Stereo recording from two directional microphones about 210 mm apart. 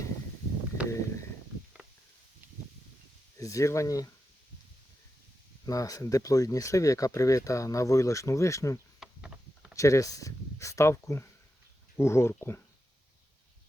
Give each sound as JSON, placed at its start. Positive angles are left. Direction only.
{"t": 3.3, "sound": "speech", "side_deg": 15}
{"t": 5.6, "sound": "speech", "side_deg": 15}
{"t": 9.0, "sound": "a sound", "side_deg": -5}
{"t": 9.7, "sound": "speech", "side_deg": 15}